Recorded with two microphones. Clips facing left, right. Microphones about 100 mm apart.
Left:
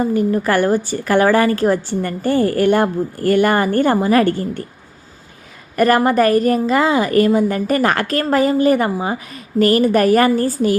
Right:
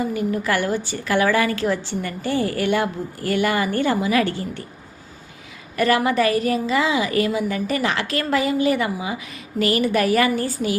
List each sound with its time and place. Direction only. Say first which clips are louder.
0.0 s a woman's voice: left 6 dB; 40° left (ahead or behind)
5.7 s a woman's voice: left 5 dB; 45° left (ahead or behind)